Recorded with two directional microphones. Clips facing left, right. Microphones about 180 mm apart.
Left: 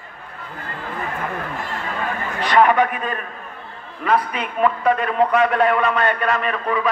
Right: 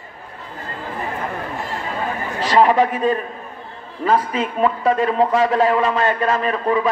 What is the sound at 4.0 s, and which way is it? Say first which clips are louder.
Speech: right 2 dB; 25° right (ahead or behind).